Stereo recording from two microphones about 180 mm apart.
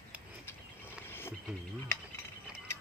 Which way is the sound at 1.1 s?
10° left (ahead or behind).